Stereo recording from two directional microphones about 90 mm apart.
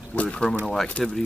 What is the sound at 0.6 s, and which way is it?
Speech, 5° left (ahead or behind).